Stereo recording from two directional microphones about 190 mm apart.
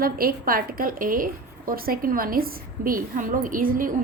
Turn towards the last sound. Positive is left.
turn(degrees=-45)  # may be behind; listen again after turning